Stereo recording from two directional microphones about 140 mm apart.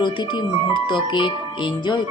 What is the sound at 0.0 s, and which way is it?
A woman's voice, 35° left (ahead or behind).